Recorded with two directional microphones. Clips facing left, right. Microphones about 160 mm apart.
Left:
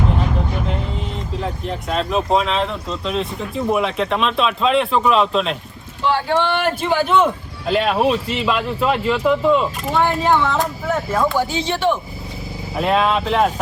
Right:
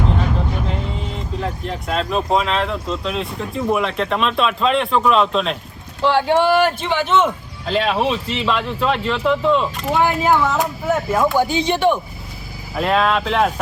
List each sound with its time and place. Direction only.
1.4 s speech: centre (ahead or behind)
11.3 s speech: 20° right (ahead or behind)
12.7 s speech: centre (ahead or behind)